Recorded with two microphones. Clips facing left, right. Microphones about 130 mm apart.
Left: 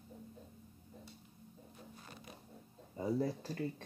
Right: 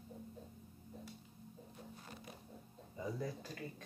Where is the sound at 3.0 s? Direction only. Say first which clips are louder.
Left 7 dB; 35° left (ahead or behind).